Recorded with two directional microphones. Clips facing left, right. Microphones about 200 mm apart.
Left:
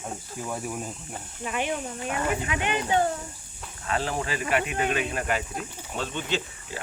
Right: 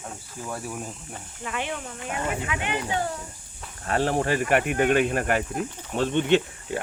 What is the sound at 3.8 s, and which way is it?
Speech, 45° right (ahead or behind).